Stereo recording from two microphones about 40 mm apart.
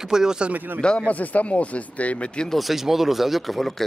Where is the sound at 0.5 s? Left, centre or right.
Right.